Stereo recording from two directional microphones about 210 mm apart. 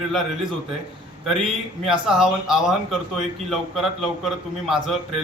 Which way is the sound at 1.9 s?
Centre (ahead or behind).